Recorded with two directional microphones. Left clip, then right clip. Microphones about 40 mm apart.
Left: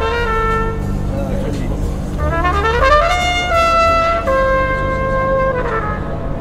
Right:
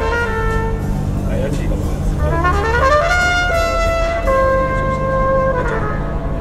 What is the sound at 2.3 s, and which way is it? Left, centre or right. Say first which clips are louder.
Trumpet: left 1 dB; right.